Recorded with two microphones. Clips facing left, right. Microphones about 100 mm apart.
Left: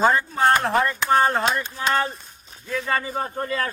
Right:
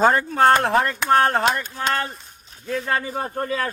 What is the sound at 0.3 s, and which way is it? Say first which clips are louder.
A man's voice: right 3 dB; 65° right (ahead or behind).